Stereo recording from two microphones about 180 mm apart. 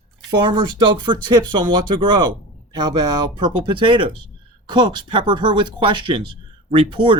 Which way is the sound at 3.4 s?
25° right (ahead or behind).